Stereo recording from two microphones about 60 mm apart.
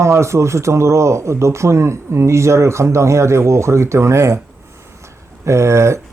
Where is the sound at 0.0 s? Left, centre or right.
Right.